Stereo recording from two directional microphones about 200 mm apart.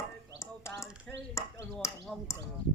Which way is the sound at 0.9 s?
5° right (ahead or behind).